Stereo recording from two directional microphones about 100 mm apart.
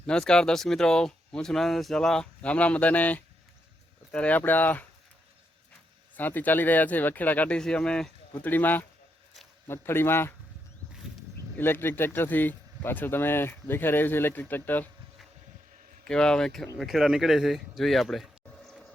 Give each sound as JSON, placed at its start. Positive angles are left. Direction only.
{"t": 0.0, "sound": "speech", "side_deg": 10}
{"t": 6.1, "sound": "speech", "side_deg": 15}
{"t": 8.3, "sound": "speech", "side_deg": 20}
{"t": 11.5, "sound": "speech", "side_deg": 20}
{"t": 16.0, "sound": "speech", "side_deg": 10}